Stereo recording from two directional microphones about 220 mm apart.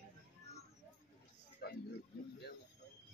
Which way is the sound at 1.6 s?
45° left (ahead or behind).